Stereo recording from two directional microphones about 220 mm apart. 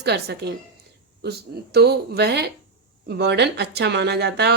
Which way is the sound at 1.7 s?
45° right (ahead or behind).